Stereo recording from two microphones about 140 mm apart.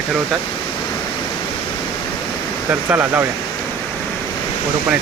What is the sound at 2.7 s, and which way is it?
Speech, 10° right (ahead or behind).